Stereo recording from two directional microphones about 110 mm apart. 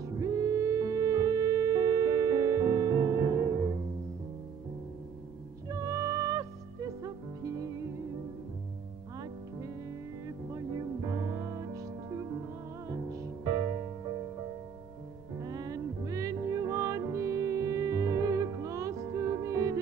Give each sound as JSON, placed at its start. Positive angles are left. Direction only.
{"t": 0.0, "sound": "music", "side_deg": -35}
{"t": 5.7, "sound": "music", "side_deg": -30}
{"t": 10.2, "sound": "music", "side_deg": -35}
{"t": 15.4, "sound": "music", "side_deg": -35}